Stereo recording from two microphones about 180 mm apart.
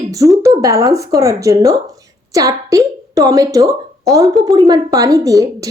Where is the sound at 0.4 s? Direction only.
20° right (ahead or behind).